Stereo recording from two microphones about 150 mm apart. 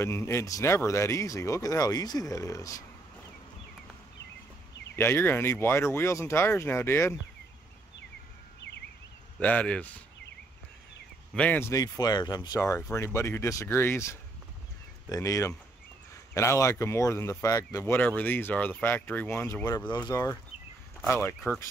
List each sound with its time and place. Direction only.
0.0 s speech: 15° left (ahead or behind)
4.9 s speech: 15° left (ahead or behind)
9.4 s speech: 10° left (ahead or behind)
11.3 s speech: 10° left (ahead or behind)
11.7 s speech: 25° left (ahead or behind)